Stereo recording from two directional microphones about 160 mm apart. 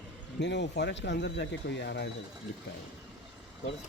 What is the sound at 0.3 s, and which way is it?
Speech, 90° left.